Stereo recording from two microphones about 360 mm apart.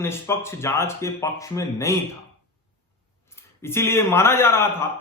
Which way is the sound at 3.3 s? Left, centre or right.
Centre.